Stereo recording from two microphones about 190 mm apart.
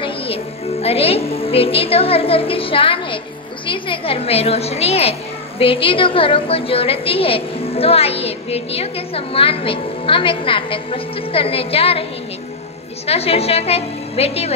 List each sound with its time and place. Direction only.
0.0 s a woman's voice: 30° left (ahead or behind)